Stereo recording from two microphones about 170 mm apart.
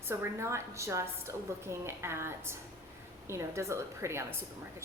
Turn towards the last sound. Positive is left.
turn(degrees=-15)  # may be behind; listen again after turning